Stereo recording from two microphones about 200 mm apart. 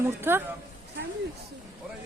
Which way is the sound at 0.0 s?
10° right (ahead or behind).